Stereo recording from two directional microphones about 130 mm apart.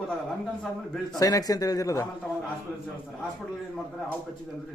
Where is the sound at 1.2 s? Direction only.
30° left (ahead or behind).